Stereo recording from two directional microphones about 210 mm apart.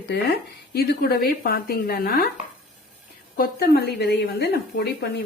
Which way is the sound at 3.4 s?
50° left (ahead or behind).